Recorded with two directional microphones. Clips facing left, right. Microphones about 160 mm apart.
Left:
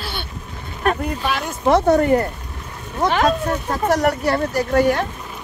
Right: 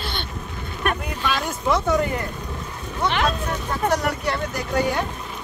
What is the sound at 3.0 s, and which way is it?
Speech, 45° left (ahead or behind).